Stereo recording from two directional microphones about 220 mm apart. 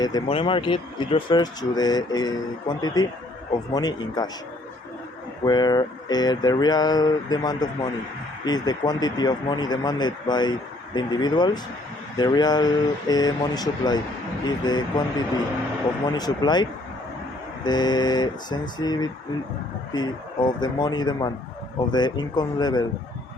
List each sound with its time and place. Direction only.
0.0 s speech: 20° left (ahead or behind)
5.5 s speech: 20° left (ahead or behind)
16.0 s speech: 20° left (ahead or behind)
17.7 s speech: 20° left (ahead or behind)